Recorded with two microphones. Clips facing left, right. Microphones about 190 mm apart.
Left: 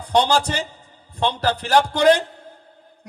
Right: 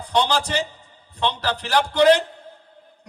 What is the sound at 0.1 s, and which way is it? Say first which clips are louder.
A man's voice: left 3 dB; 45° left (ahead or behind).